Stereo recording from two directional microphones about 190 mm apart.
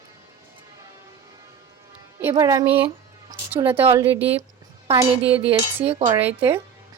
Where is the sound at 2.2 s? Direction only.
15° right (ahead or behind).